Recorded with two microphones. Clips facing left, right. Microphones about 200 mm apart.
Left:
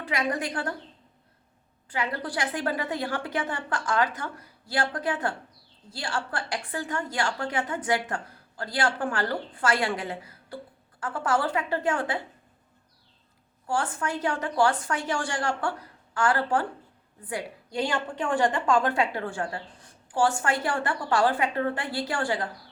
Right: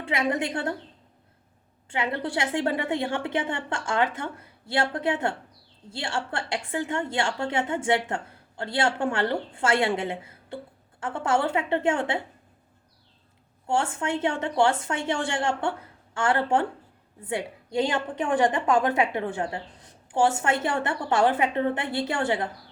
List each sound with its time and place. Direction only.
0.0 s a woman's voice: 25° right (ahead or behind)
1.9 s a woman's voice: 25° right (ahead or behind)
13.7 s a woman's voice: 25° right (ahead or behind)